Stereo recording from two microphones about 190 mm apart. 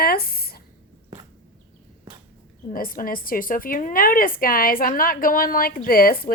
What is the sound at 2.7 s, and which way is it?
A woman's voice, 50° left (ahead or behind).